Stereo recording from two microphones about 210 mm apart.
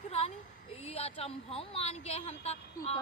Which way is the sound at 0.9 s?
30° left (ahead or behind).